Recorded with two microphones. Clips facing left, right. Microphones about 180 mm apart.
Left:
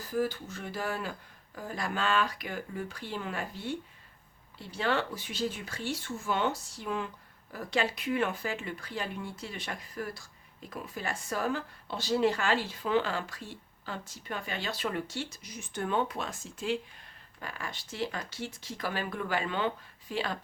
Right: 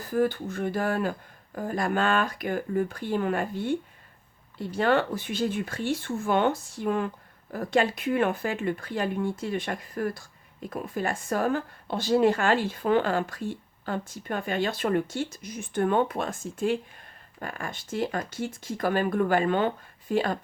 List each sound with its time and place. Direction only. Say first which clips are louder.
0.0 s speech: right 6 dB; 55° right (ahead or behind)